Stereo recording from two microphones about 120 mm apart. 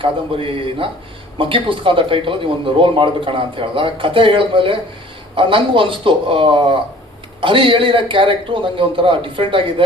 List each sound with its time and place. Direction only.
0.0 s speech: 50° right (ahead or behind)